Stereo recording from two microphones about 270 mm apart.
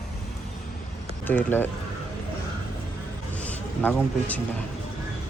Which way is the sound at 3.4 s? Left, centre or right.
Centre.